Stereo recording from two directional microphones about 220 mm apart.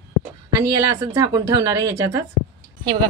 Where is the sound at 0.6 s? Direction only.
15° right (ahead or behind).